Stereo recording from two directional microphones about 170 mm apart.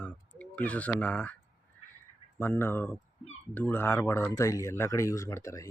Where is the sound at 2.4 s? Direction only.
10° left (ahead or behind).